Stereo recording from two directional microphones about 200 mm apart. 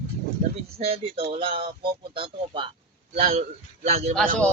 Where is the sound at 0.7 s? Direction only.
30° right (ahead or behind).